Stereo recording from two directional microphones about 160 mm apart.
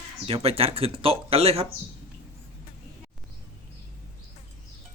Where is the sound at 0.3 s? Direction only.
35° right (ahead or behind).